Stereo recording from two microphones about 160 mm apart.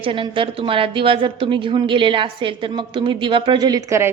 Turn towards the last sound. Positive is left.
turn(degrees=-15)  # may be behind; listen again after turning